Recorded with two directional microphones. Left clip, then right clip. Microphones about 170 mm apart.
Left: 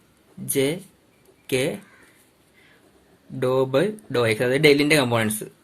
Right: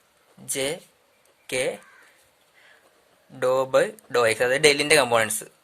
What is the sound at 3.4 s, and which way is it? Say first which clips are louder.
Speech: even; 35° right (ahead or behind).